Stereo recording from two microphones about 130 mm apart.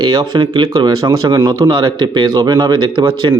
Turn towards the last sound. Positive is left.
turn(degrees=-35)  # may be behind; listen again after turning